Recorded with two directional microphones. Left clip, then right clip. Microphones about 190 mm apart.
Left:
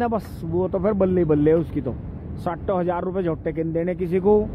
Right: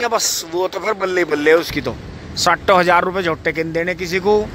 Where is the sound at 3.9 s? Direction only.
20° left (ahead or behind).